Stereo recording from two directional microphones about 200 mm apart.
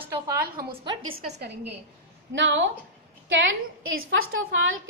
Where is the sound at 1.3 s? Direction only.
60° right (ahead or behind).